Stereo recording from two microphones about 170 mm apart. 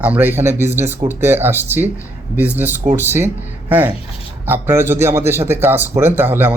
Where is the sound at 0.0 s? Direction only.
10° right (ahead or behind).